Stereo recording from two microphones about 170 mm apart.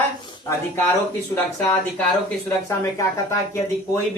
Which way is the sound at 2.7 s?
15° left (ahead or behind).